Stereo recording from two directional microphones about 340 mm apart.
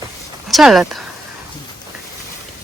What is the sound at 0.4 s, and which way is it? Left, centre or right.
Speech, centre.